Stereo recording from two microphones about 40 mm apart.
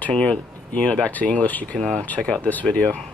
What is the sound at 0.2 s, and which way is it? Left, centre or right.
Speech, left.